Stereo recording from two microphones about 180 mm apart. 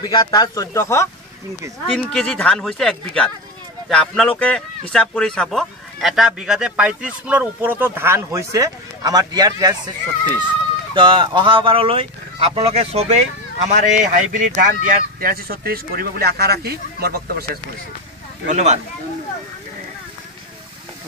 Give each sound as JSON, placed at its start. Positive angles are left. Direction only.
{"t": 0.0, "sound": "speech", "side_deg": 25}
{"t": 1.9, "sound": "speech", "side_deg": 5}
{"t": 11.0, "sound": "speech", "side_deg": -25}
{"t": 18.5, "sound": "speech", "side_deg": -40}